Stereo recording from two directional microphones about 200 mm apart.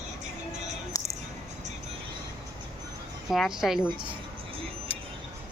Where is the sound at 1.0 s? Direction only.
15° left (ahead or behind).